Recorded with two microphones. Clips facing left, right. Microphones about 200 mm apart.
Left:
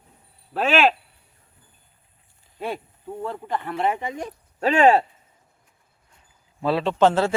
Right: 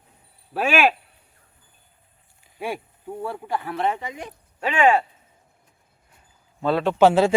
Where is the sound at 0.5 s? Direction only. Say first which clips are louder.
Left 1 dB; 10° right (ahead or behind).